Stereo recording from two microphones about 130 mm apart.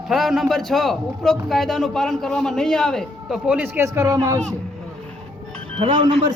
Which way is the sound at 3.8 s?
25° right (ahead or behind).